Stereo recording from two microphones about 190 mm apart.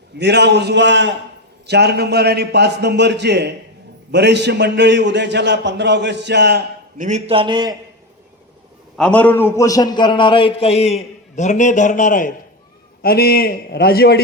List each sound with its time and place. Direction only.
0.2 s a man's voice: 60° right (ahead or behind)
7.0 s a man's voice: 35° right (ahead or behind)
9.0 s a man's voice: 5° left (ahead or behind); by 14.2 s 55° left (ahead or behind)